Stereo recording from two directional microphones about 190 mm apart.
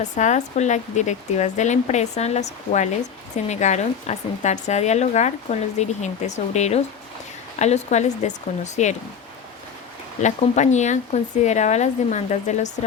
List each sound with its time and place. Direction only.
0.0 s a woman's voice: 40° left (ahead or behind)
10.2 s a woman's voice: 40° left (ahead or behind)